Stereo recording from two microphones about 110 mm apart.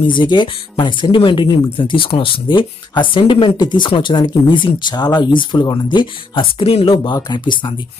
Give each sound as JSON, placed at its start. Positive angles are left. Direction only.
{"t": 0.0, "sound": "speech", "side_deg": 45}
{"t": 6.7, "sound": "speech", "side_deg": 60}
{"t": 7.3, "sound": "speech", "side_deg": 45}